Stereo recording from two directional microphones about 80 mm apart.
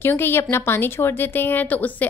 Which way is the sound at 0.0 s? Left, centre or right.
Left.